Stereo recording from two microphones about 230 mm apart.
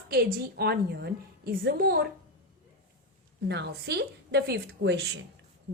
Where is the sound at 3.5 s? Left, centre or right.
Right.